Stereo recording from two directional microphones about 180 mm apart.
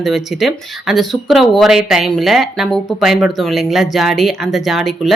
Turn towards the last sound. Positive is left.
turn(degrees=0)  # may be behind; listen again after turning